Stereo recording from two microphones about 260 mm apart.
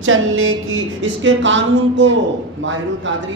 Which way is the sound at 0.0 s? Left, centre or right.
Right.